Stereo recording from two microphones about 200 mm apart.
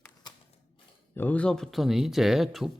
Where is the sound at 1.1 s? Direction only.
10° left (ahead or behind).